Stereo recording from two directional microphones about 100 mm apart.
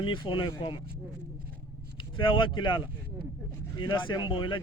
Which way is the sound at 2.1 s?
55° left (ahead or behind).